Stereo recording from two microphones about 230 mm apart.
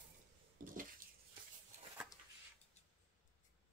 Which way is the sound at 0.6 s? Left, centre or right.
Right.